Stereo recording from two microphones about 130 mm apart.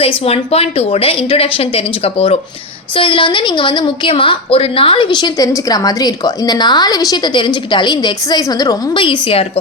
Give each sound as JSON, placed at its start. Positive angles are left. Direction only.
{"t": 0.2, "sound": "a woman's voice", "side_deg": 50}